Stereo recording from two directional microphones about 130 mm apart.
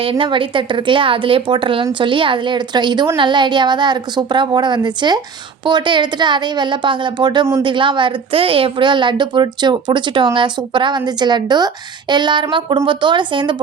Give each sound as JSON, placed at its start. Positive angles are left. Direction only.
{"t": 0.0, "sound": "a woman's voice", "side_deg": -40}